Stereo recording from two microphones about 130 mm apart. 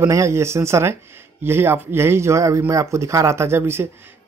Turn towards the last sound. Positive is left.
turn(degrees=-15)  # may be behind; listen again after turning